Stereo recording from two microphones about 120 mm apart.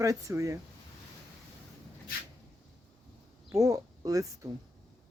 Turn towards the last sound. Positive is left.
turn(degrees=-30)  # may be behind; listen again after turning